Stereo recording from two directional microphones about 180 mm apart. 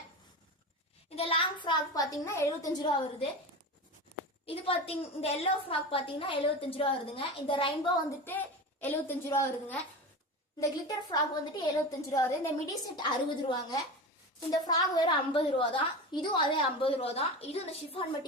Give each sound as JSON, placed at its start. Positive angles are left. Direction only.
{"t": 1.1, "sound": "a child's voice", "side_deg": 30}
{"t": 4.4, "sound": "a woman's voice", "side_deg": 30}
{"t": 8.2, "sound": "a woman's voice", "side_deg": 10}